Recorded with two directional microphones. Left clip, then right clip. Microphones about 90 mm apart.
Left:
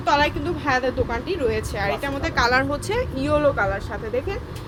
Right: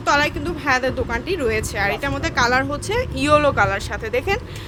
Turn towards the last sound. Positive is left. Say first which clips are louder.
# right 3 dB
turn(degrees=-90)